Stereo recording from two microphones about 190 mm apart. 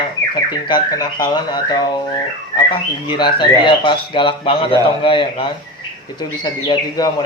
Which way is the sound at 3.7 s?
25° left (ahead or behind).